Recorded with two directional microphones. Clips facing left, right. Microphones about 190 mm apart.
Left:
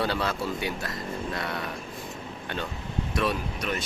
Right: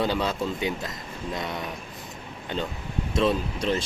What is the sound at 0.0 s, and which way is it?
Speech, 15° right (ahead or behind).